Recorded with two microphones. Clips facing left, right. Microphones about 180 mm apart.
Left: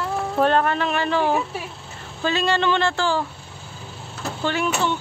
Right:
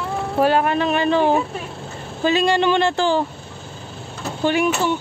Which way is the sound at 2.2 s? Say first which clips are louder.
Right 4 dB; 15° right (ahead or behind).